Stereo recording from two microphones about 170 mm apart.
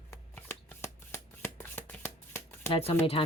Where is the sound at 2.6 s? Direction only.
35° left (ahead or behind).